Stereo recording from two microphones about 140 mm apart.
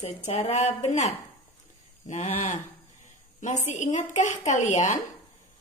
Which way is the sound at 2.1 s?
55° left (ahead or behind).